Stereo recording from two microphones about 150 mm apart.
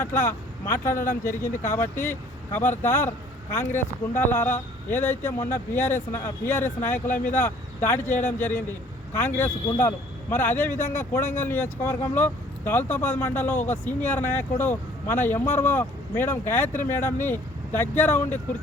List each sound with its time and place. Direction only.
0.0 s speech: 15° left (ahead or behind)
4.1 s speech: 15° left (ahead or behind)